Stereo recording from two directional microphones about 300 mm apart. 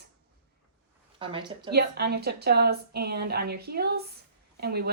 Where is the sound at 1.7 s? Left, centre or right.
Right.